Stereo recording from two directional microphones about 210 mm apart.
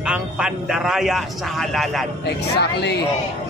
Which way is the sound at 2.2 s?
55° left (ahead or behind).